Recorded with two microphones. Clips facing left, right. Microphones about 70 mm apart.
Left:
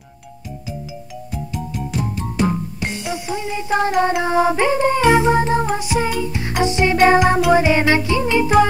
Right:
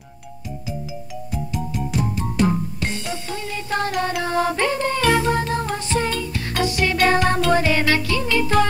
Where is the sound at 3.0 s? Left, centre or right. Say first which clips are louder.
Left 4 dB; centre.